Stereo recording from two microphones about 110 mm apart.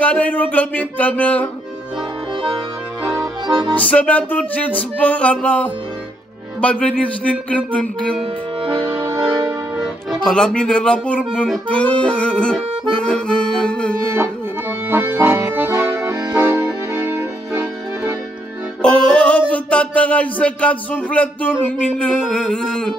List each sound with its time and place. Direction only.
0.0 s speech: 10° left (ahead or behind)
3.4 s accordion: 35° right (ahead or behind)
3.7 s speech: 10° left (ahead or behind)
9.8 s music: 5° left (ahead or behind)
11.7 s speech: 10° left (ahead or behind)
14.9 s accordion: 20° right (ahead or behind)
18.8 s music: 5° left (ahead or behind)
19.5 s speech: 10° left (ahead or behind)